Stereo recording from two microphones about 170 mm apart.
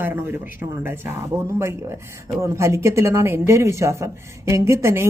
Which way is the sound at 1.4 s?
15° right (ahead or behind).